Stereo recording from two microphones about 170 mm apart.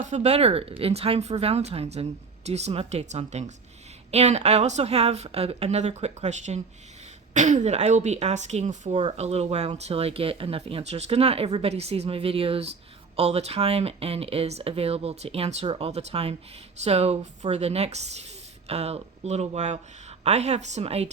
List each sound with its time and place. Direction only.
0.1 s speech: 40° right (ahead or behind)